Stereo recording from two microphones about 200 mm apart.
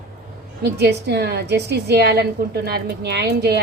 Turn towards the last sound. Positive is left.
turn(degrees=-55)  # may be behind; listen again after turning